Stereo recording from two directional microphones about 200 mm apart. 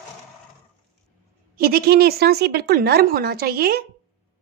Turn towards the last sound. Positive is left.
turn(degrees=-50)  # may be behind; listen again after turning